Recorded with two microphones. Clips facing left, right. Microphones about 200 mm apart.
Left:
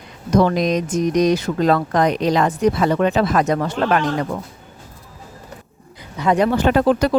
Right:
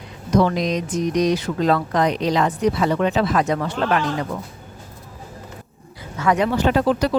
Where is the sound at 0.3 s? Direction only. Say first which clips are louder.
Left 2 dB; 45° left (ahead or behind).